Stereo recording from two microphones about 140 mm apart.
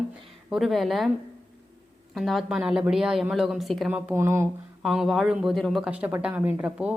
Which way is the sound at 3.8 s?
15° right (ahead or behind).